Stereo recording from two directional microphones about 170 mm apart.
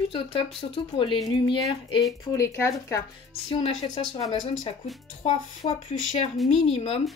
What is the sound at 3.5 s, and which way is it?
Speech, 30° left (ahead or behind).